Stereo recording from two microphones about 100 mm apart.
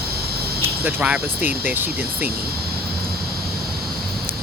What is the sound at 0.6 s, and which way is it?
Speech, 15° right (ahead or behind).